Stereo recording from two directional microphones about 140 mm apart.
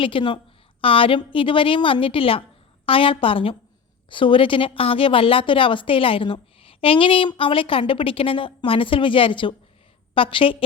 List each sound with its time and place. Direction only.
0.0 s a woman's voice: 40° left (ahead or behind)